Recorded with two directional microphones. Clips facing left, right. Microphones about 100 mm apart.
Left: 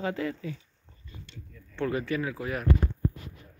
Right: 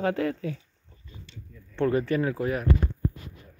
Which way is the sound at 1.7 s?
35° right (ahead or behind).